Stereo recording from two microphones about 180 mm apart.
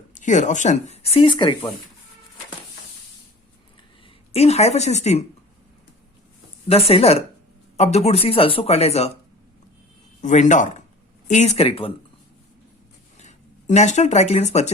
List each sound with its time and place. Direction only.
0.1 s speech: 45° left (ahead or behind); by 1.7 s 25° left (ahead or behind)
4.3 s speech: 35° left (ahead or behind)
6.7 s speech: 35° left (ahead or behind)
10.2 s speech: 40° left (ahead or behind)
13.1 s speech: 40° left (ahead or behind)